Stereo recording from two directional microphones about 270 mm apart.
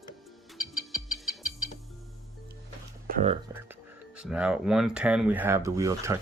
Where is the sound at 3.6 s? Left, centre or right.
Centre.